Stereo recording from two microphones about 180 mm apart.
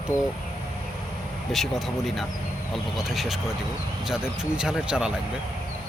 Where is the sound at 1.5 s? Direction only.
Centre (ahead or behind).